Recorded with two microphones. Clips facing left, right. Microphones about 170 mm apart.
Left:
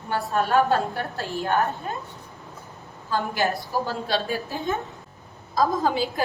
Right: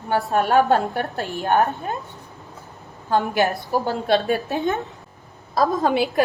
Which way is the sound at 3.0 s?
60° right (ahead or behind).